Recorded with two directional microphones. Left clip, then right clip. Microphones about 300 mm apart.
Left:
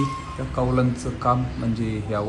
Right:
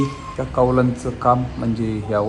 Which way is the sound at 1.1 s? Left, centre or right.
Right.